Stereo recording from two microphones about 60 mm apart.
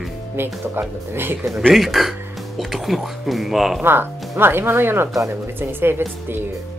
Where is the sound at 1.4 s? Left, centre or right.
Centre.